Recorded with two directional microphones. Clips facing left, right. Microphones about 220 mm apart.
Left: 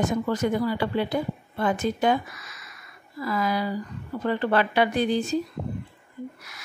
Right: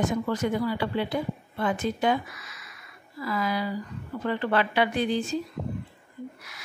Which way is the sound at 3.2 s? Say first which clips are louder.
Left 2 dB; 45° left (ahead or behind).